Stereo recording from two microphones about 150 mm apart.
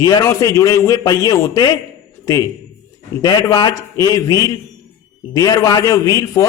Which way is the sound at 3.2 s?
25° left (ahead or behind).